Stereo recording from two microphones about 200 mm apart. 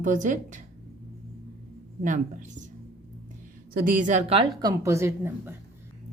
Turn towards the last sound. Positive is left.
turn(degrees=-10)  # may be behind; listen again after turning